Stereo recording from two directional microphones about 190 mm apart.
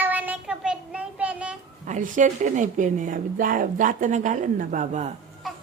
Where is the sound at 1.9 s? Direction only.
40° right (ahead or behind).